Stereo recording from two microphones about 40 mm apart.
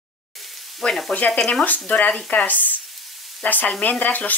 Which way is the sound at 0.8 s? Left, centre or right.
Left.